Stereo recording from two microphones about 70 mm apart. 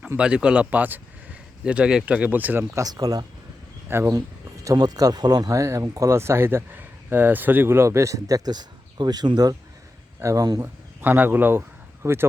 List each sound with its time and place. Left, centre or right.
0.2 s speech: centre
1.6 s speech: centre
2.8 s speech: right
3.8 s speech: right
4.6 s speech: right
5.5 s speech: right
8.4 s speech: right
10.2 s speech: right
10.6 s speech: right
12.0 s speech: right